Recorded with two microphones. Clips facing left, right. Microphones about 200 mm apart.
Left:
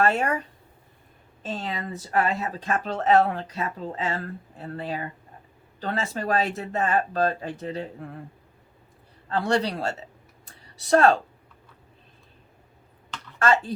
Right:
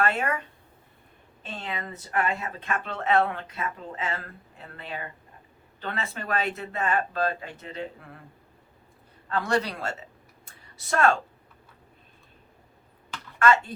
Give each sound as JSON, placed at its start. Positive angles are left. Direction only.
{"t": 0.0, "sound": "speech", "side_deg": 40}
{"t": 9.3, "sound": "speech", "side_deg": 30}
{"t": 10.4, "sound": "a sound", "side_deg": 35}
{"t": 13.4, "sound": "speech", "side_deg": 35}